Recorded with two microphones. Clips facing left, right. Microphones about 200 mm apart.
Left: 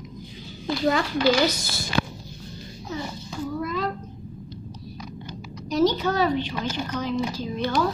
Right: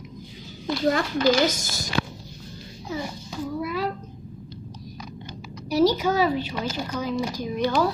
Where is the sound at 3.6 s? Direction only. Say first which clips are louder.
Right 1 dB; 10° right (ahead or behind).